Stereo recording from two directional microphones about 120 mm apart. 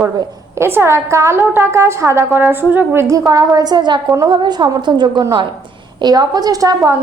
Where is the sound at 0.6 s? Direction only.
20° right (ahead or behind).